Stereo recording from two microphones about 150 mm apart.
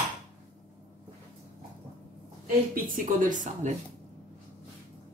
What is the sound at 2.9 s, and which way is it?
Speech, 60° right (ahead or behind).